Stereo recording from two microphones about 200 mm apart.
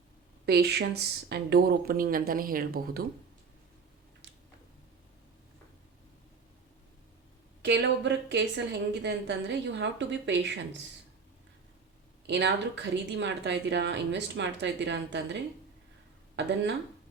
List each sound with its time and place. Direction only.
0.4 s speech: 55° right (ahead or behind)
7.6 s speech: 60° right (ahead or behind)
12.3 s speech: 60° right (ahead or behind)
16.4 s speech: 60° right (ahead or behind)